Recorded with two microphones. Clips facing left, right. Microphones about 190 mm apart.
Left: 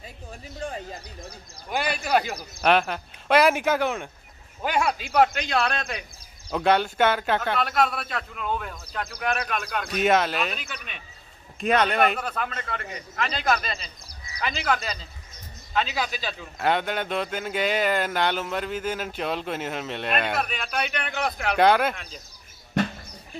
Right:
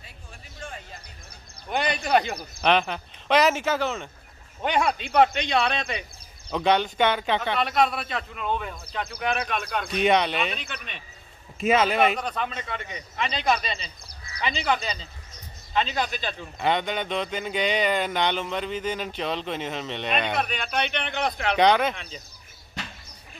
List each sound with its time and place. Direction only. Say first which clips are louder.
0.6 s speech: left 6 dB; 40° left (ahead or behind)
1.7 s a man's voice: right 1 dB; 5° left (ahead or behind)